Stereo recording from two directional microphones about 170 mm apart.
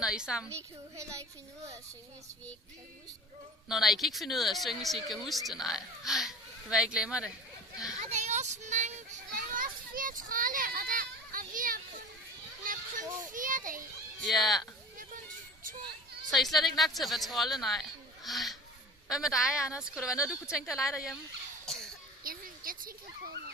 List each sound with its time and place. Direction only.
0.0 s a woman's voice: 5° right (ahead or behind)
0.5 s a child's voice: 15° right (ahead or behind)
3.6 s a woman's voice: centre (ahead or behind)
8.0 s a child's voice: 45° right (ahead or behind)
13.2 s a child's voice: 50° right (ahead or behind)
14.2 s a woman's voice: centre (ahead or behind)
16.3 s a woman's voice: centre (ahead or behind)
21.6 s a sound: 5° left (ahead or behind)
22.2 s dog: 55° right (ahead or behind)